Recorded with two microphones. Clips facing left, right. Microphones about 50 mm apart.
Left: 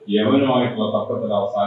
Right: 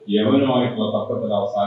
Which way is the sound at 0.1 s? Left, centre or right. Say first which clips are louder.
Even; left.